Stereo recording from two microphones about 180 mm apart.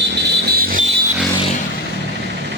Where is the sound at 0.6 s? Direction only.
55° right (ahead or behind).